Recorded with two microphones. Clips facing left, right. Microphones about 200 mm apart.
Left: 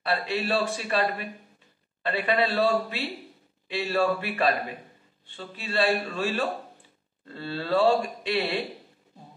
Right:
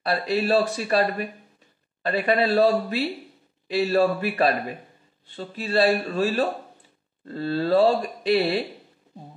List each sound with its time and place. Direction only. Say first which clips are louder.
0.0 s speech: right 4 dB; 40° right (ahead or behind)